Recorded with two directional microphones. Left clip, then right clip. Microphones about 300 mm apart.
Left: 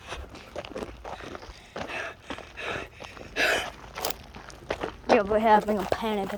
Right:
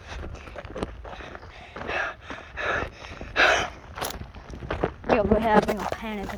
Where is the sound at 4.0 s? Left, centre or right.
Left.